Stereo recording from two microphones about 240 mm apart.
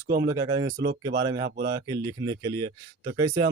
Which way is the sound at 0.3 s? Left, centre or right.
Centre.